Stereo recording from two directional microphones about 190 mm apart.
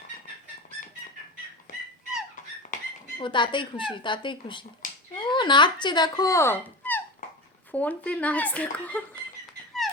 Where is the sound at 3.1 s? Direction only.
25° left (ahead or behind); by 9.0 s 5° left (ahead or behind).